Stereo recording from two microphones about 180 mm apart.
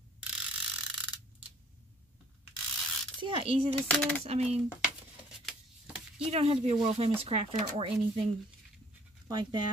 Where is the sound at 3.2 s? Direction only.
30° right (ahead or behind).